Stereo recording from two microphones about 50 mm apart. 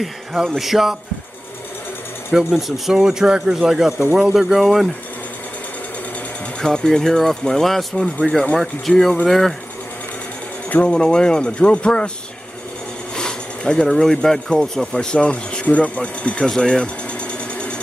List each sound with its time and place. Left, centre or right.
0.0 s speech: centre
2.3 s speech: centre
6.6 s speech: centre
8.5 s speech: centre
10.7 s speech: left
13.1 s speech: centre
16.4 s sewing machine: centre